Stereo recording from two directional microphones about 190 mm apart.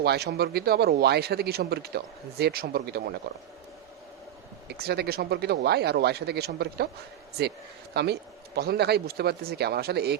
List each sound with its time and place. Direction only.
0.0 s speech: 60° right (ahead or behind)
4.8 s speech: 55° right (ahead or behind)
7.9 s speech: 60° right (ahead or behind)